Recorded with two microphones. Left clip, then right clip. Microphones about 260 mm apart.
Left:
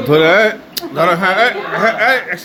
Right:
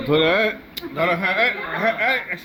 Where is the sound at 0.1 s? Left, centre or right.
Left.